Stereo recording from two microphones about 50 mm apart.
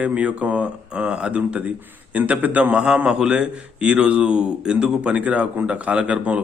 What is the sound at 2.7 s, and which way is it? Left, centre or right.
A man's voice, centre.